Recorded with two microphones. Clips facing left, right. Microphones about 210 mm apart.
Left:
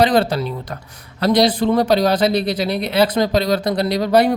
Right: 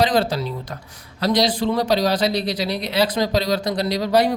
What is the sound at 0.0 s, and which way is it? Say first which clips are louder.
A man's voice: left 4 dB; 60° left (ahead or behind).